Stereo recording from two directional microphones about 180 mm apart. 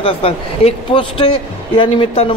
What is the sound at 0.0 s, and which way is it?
Speech, 30° left (ahead or behind).